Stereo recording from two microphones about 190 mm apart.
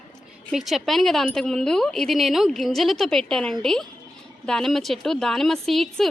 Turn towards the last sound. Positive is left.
turn(degrees=0)  # may be behind; listen again after turning